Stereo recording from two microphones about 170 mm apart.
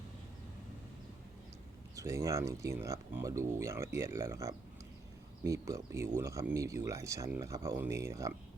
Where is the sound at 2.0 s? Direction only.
20° right (ahead or behind).